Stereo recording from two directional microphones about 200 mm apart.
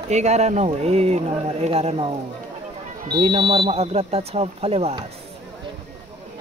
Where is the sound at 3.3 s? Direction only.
25° right (ahead or behind).